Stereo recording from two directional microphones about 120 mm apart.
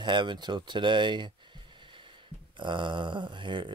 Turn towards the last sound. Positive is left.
turn(degrees=-40)  # may be behind; listen again after turning